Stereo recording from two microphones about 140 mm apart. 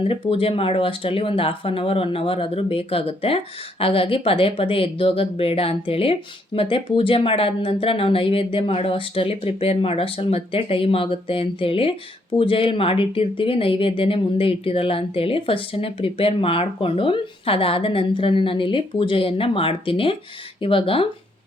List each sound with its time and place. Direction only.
0.1 s speech: 45° left (ahead or behind)